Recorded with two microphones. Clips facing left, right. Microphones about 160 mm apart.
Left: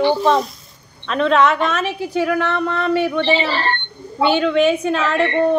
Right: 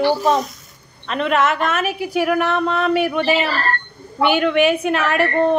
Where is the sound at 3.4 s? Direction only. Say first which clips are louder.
Left 1 dB; 30° left (ahead or behind).